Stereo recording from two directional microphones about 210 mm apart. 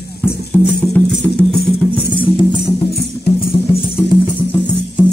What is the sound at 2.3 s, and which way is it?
Music, 25° left (ahead or behind).